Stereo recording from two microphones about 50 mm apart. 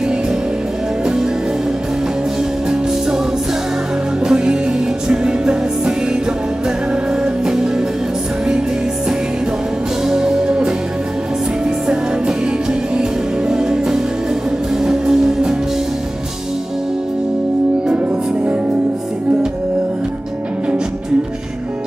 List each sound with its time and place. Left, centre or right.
4.2 s music: centre
7.1 s music: centre
10.0 s music: centre
13.5 s music: centre
17.8 s music: right